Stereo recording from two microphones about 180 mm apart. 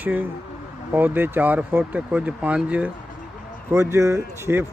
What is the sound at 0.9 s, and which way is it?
Speech, 10° right (ahead or behind).